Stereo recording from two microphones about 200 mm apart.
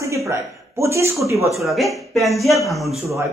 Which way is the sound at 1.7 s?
Centre (ahead or behind).